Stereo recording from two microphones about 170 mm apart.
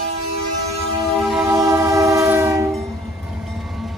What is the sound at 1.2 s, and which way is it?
Music, centre (ahead or behind).